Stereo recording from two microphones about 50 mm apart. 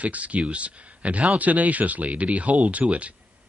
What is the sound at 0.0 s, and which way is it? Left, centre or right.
Speech, right.